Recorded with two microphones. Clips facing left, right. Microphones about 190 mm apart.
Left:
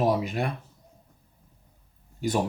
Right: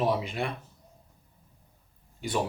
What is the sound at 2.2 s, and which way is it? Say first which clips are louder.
Speech: left 4 dB; 45° left (ahead or behind).